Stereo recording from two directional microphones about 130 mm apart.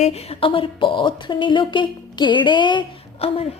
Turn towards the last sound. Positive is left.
turn(degrees=50)  # may be behind; listen again after turning